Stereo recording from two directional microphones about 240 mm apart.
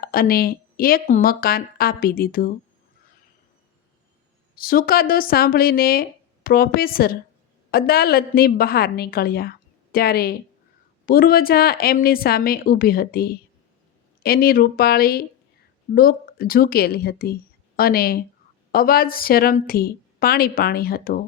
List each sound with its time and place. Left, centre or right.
0.0 s speech: left
4.5 s speech: left